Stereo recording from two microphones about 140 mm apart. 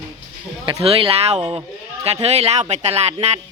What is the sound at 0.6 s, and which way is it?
Speech, 40° right (ahead or behind).